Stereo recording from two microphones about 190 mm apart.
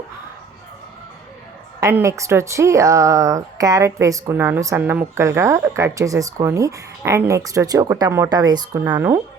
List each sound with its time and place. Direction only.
1.8 s speech: 15° right (ahead or behind)